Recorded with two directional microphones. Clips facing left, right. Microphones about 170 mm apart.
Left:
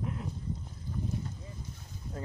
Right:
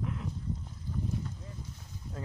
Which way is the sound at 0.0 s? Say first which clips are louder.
Even; 40° left (ahead or behind).